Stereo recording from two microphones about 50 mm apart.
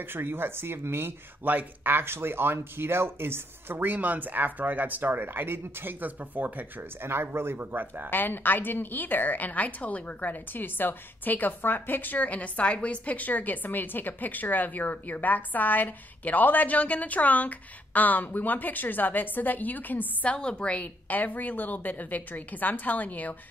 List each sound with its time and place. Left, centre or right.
0.0 s speech: right
1.4 s speech: right
5.2 s speech: right
6.8 s speech: right
8.1 s a woman's voice: left
20.3 s a woman's voice: centre